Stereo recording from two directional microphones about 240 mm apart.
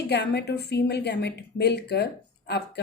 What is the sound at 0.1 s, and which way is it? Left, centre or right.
Speech, left.